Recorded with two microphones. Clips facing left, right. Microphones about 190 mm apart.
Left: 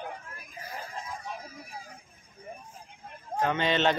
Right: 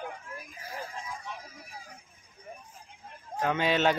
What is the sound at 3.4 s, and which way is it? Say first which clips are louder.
Speech: even; 5° right (ahead or behind).